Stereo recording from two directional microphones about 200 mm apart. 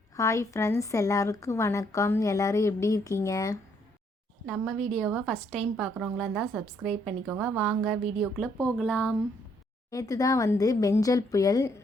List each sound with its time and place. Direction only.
0.2 s a woman's voice: 15° left (ahead or behind)
4.4 s a woman's voice: centre (ahead or behind)
9.9 s a woman's voice: 15° left (ahead or behind)